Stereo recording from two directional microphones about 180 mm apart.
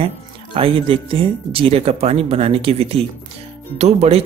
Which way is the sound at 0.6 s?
30° right (ahead or behind).